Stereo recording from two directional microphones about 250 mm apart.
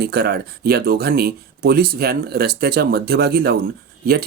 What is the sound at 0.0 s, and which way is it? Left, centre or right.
Speech, right.